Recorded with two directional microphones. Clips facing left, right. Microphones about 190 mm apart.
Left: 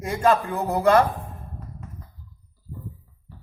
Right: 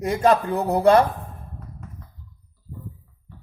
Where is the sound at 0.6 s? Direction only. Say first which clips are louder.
Right 2 dB; 35° right (ahead or behind).